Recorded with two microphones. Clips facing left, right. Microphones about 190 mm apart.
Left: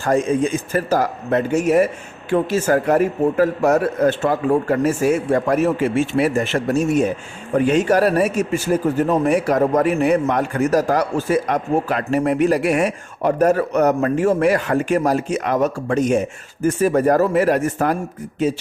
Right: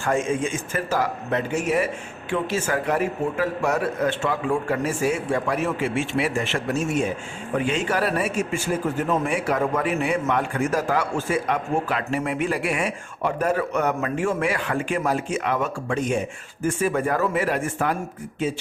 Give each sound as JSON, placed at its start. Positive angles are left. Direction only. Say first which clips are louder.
{"t": 0.0, "sound": "a man's voice", "louder": "left 5 dB", "side_deg": 35}